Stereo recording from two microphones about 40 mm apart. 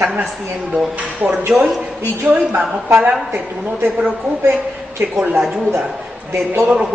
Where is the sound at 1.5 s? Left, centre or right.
Centre.